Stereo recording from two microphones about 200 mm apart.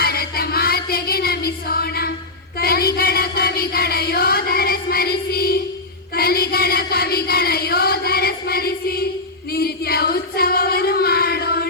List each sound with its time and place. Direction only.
0.0 s music: 50° left (ahead or behind)
2.6 s a sound: 50° left (ahead or behind)
9.5 s singing: 50° left (ahead or behind)